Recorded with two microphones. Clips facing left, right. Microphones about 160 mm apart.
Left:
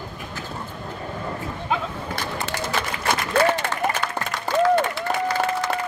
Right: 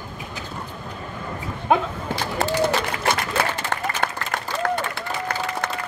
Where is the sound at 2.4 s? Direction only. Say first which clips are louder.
Right 8 dB; 65° right (ahead or behind).